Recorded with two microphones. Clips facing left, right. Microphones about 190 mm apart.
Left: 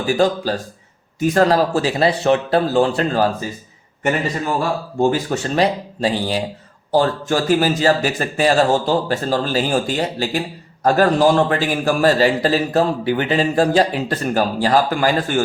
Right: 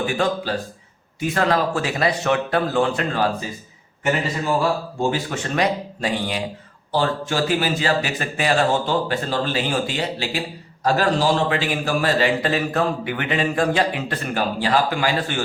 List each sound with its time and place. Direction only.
0.1 s a man's voice: 35° left (ahead or behind)
5.1 s a man's voice: 35° left (ahead or behind)
6.9 s a man's voice: 45° left (ahead or behind)